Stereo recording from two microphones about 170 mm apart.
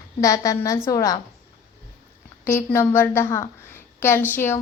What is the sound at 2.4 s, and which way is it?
A woman's voice, 15° left (ahead or behind).